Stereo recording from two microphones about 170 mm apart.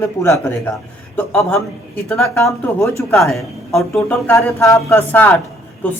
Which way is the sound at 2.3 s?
15° left (ahead or behind).